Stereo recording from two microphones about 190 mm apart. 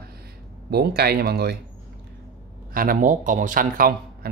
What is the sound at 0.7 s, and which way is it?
Speech, 55° right (ahead or behind).